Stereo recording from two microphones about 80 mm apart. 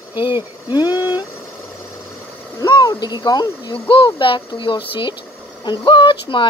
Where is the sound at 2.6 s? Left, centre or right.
Left.